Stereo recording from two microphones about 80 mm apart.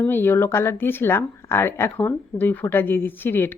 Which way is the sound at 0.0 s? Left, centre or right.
Left.